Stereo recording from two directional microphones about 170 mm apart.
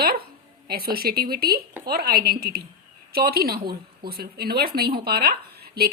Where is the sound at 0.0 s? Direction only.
65° right (ahead or behind).